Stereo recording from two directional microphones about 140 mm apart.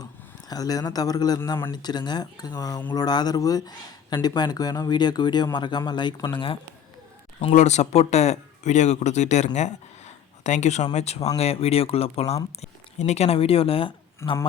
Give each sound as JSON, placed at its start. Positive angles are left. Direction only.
{"t": 0.0, "sound": "speech", "side_deg": 30}
{"t": 7.5, "sound": "speech", "side_deg": 55}
{"t": 14.2, "sound": "speech", "side_deg": 20}